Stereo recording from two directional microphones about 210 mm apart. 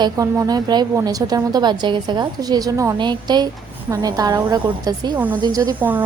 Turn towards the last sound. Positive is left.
turn(degrees=-10)  # may be behind; listen again after turning